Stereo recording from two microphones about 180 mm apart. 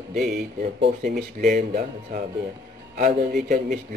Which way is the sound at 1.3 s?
55° right (ahead or behind).